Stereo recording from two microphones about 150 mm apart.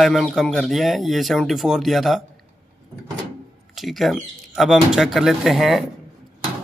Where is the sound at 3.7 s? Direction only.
Centre (ahead or behind).